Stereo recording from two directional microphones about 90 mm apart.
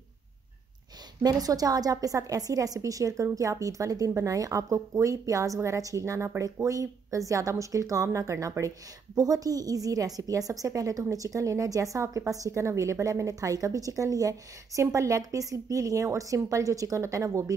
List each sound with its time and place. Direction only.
1.2 s a woman's voice: 45° right (ahead or behind)